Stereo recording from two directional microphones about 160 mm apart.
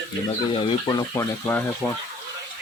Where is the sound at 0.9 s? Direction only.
20° left (ahead or behind).